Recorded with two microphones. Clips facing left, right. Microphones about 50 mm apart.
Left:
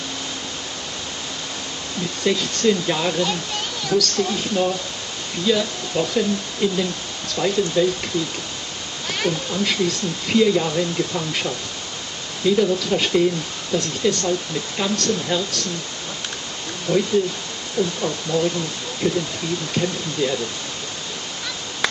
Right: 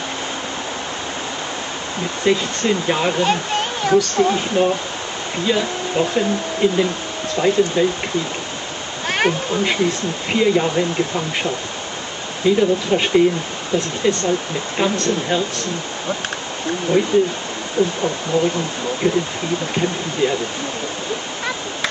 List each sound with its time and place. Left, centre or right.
2.2 s speech: right
3.3 s speech: right
9.0 s waterfall: right
9.6 s speech: right
16.9 s speech: right